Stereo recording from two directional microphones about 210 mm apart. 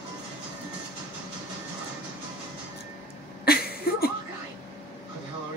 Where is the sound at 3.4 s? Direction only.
45° left (ahead or behind).